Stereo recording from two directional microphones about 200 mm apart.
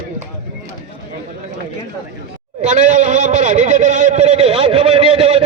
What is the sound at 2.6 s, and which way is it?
A man's voice, 35° right (ahead or behind).